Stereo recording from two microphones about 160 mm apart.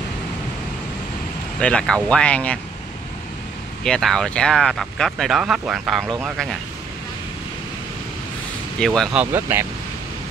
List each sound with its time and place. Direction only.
1.6 s speech: 5° left (ahead or behind)
3.8 s speech: centre (ahead or behind)
6.0 s speech: 15° right (ahead or behind)
8.7 s speech: 5° left (ahead or behind)
9.2 s speech: 15° right (ahead or behind)